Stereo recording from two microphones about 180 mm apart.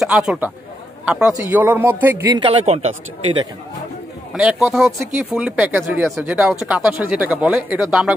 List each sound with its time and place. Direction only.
0.0 s a man's voice: centre (ahead or behind)
2.3 s speech: 30° right (ahead or behind)
4.3 s speech: centre (ahead or behind)